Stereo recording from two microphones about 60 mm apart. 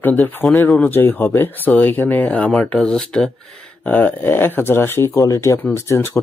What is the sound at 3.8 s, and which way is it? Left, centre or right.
Speech, left.